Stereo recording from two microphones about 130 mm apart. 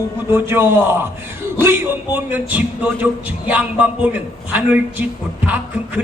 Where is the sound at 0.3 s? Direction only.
15° right (ahead or behind).